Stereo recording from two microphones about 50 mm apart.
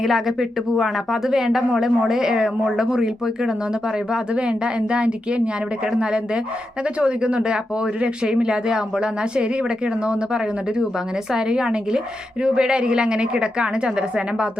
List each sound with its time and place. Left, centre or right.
0.0 s a woman's voice: centre